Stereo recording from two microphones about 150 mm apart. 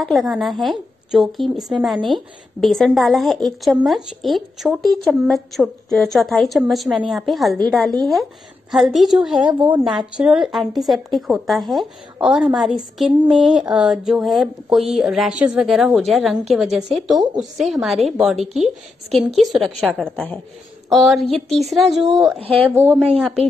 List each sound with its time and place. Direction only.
0.0 s a woman's voice: centre (ahead or behind)
22.4 s speech: 40° right (ahead or behind)
22.7 s a woman's voice: 15° right (ahead or behind)
23.1 s a woman's voice: centre (ahead or behind)